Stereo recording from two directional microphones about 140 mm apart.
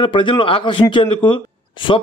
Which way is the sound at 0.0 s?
35° left (ahead or behind).